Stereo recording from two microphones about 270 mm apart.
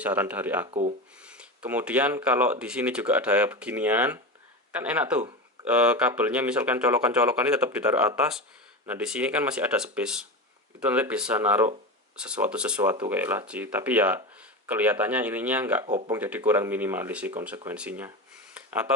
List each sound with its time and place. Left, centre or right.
0.0 s speech: centre
0.7 s speech: right
1.2 s speech: centre